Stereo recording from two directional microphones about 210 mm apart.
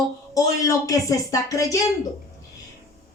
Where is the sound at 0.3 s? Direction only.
15° left (ahead or behind).